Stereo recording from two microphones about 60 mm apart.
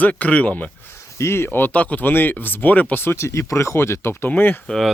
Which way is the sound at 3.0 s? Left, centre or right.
Left.